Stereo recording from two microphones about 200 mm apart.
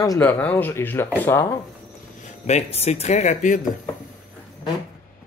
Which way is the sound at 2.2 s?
35° left (ahead or behind).